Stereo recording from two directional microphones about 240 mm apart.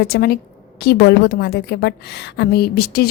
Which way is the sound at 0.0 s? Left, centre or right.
Left.